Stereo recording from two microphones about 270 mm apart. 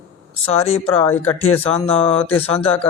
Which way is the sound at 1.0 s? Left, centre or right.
Centre.